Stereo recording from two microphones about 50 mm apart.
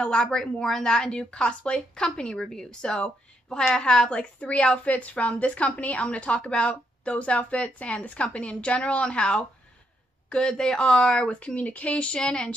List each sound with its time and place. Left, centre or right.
0.0 s a woman's voice: centre
10.6 s a woman's voice: centre